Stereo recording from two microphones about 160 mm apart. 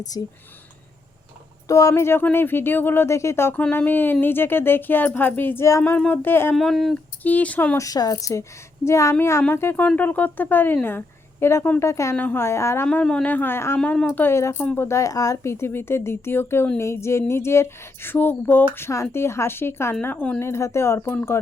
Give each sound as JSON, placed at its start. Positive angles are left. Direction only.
{"t": 0.1, "sound": "a woman's voice", "side_deg": 25}
{"t": 1.6, "sound": "speech", "side_deg": 20}
{"t": 6.6, "sound": "speech", "side_deg": 0}
{"t": 7.9, "sound": "a woman's voice", "side_deg": 25}